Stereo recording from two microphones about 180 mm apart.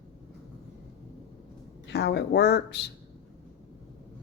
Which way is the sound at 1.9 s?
70° left (ahead or behind).